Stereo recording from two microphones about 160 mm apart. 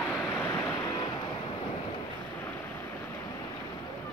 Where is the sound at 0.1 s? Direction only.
15° left (ahead or behind).